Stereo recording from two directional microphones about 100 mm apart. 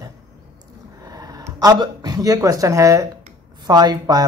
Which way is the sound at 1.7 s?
45° right (ahead or behind).